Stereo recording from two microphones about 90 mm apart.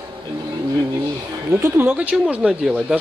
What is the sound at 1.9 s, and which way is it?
Speech, 15° right (ahead or behind).